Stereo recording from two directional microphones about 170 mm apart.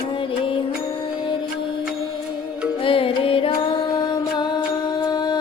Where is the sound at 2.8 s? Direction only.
30° left (ahead or behind).